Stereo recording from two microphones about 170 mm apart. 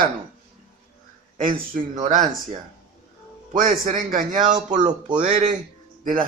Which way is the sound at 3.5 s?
50° right (ahead or behind).